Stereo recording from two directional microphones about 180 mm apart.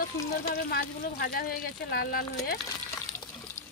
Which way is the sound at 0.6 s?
60° left (ahead or behind).